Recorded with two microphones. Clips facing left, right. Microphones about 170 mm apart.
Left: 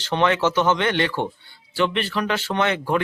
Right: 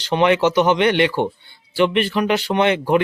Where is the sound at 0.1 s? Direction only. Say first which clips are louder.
Right 4 dB; 15° right (ahead or behind).